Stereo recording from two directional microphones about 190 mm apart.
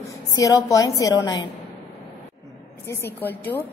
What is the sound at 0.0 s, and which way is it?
A woman's voice, 15° left (ahead or behind).